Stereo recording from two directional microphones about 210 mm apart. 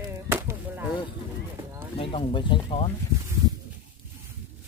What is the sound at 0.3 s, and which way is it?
Chop, 10° right (ahead or behind).